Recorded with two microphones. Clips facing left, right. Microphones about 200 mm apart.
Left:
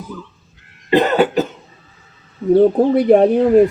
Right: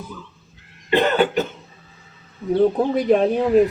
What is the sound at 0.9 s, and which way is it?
Cough, 40° left (ahead or behind).